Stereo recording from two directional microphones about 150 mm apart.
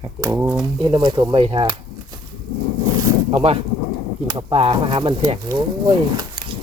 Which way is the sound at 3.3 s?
40° right (ahead or behind).